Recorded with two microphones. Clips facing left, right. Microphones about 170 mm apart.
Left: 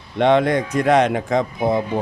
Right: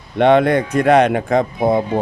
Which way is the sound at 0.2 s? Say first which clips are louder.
Right 3 dB; 60° right (ahead or behind).